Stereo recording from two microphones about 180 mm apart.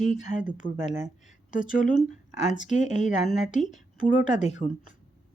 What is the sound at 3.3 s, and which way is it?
Speech, centre (ahead or behind).